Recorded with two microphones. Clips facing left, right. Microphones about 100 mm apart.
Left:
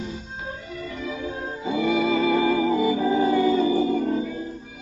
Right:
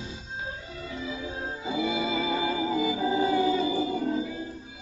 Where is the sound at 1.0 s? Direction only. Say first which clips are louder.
Left 4 dB; 50° left (ahead or behind).